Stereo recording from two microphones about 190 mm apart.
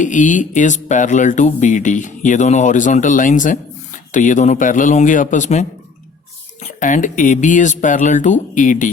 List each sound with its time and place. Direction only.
0.0 s speech: 40° left (ahead or behind)